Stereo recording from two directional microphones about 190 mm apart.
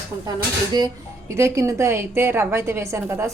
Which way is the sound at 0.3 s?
20° right (ahead or behind).